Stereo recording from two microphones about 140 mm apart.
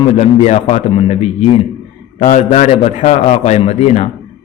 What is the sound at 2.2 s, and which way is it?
A man's voice, 60° left (ahead or behind).